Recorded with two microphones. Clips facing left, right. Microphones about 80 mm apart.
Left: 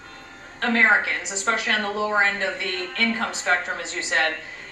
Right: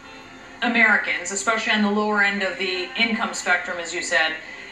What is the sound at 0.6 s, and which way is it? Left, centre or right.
A woman's voice, right.